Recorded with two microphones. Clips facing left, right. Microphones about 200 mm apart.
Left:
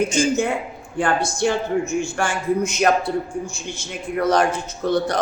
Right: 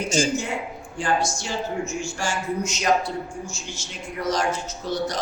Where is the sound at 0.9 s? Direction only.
60° left (ahead or behind).